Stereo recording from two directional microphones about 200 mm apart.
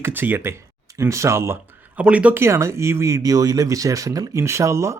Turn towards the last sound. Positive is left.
turn(degrees=-15)  # may be behind; listen again after turning